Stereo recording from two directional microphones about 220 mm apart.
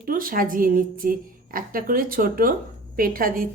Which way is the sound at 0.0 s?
40° right (ahead or behind).